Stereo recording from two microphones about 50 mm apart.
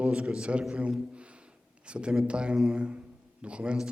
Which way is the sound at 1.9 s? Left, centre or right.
Centre.